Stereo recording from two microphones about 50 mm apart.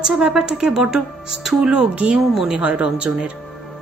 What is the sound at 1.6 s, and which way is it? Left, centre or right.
Speech, right.